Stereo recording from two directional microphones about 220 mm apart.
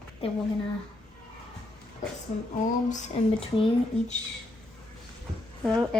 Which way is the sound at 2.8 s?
35° left (ahead or behind).